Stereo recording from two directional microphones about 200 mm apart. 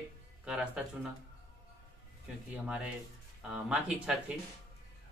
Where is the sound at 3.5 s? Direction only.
5° right (ahead or behind).